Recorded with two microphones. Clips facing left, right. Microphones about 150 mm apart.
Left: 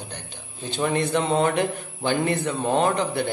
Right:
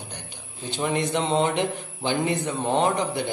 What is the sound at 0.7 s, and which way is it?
A man's voice, 15° right (ahead or behind).